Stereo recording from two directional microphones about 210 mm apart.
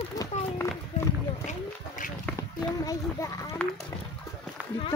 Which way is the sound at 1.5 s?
40° left (ahead or behind).